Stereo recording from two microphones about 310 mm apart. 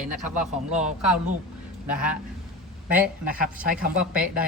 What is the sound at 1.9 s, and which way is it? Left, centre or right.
Speech, centre.